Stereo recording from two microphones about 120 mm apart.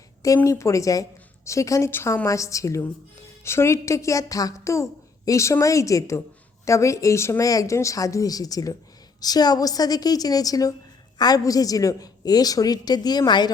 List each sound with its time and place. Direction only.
0.4 s a woman's voice: 25° left (ahead or behind)